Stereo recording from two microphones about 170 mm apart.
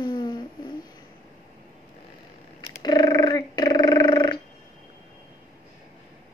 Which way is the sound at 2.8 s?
25° left (ahead or behind).